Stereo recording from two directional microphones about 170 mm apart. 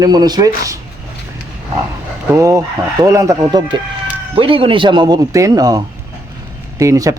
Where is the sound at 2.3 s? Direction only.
20° right (ahead or behind).